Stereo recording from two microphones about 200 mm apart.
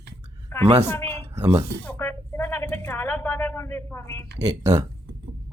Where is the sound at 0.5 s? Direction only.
10° left (ahead or behind).